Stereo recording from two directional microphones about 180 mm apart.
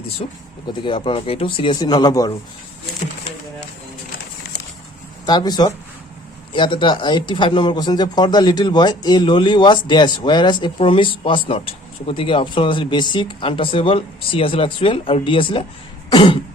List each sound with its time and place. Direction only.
0.2 s speech: 35° left (ahead or behind)
5.2 s speech: 25° left (ahead or behind)